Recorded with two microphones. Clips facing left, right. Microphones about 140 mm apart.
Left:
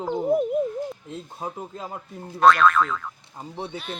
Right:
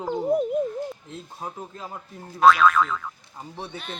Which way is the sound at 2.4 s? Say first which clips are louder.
Even; centre (ahead or behind).